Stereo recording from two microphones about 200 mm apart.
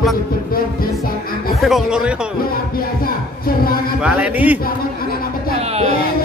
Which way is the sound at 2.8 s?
45° left (ahead or behind).